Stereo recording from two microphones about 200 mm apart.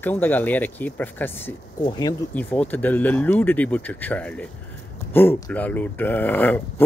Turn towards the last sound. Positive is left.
turn(degrees=10)  # may be behind; listen again after turning